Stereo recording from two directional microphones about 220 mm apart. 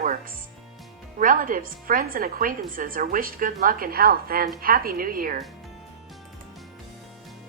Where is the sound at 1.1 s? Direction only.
40° right (ahead or behind).